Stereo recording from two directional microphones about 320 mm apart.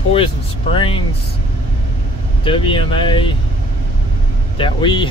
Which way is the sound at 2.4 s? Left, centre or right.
Centre.